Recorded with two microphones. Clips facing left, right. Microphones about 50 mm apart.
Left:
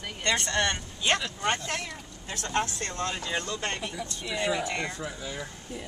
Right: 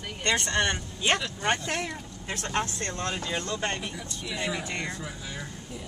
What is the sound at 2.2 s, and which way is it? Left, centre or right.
Speech, right.